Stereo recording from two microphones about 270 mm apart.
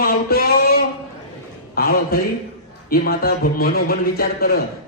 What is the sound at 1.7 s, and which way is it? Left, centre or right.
A man's voice, left.